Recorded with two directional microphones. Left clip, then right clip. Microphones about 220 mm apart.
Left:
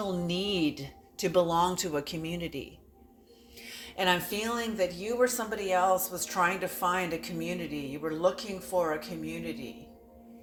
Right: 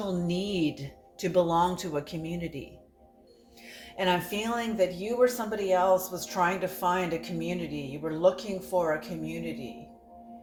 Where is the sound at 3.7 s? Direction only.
25° left (ahead or behind).